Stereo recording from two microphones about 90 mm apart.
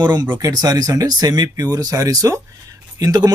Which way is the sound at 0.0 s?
55° right (ahead or behind).